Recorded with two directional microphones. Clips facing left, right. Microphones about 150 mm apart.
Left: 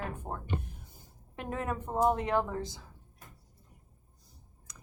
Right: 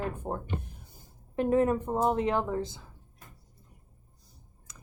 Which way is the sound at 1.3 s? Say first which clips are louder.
Right 11 dB; 35° right (ahead or behind).